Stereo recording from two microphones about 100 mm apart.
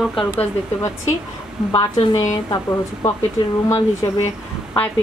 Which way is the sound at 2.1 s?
35° left (ahead or behind).